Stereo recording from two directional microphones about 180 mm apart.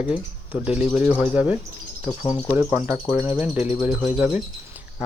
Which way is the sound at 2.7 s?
10° right (ahead or behind).